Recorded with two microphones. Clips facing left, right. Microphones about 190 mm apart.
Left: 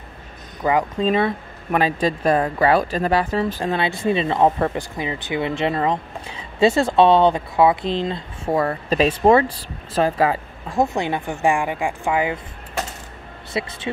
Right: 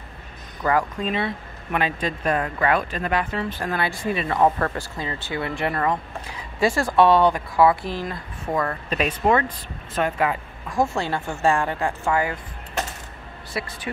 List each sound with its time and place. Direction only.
0.6 s speech: 20° left (ahead or behind)
1.0 s speech: 40° left (ahead or behind)
3.6 s speech: 25° left (ahead or behind)
10.8 s speech: 20° left (ahead or behind)
13.5 s speech: 20° left (ahead or behind)